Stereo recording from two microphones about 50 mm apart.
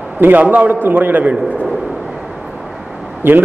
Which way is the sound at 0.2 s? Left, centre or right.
Right.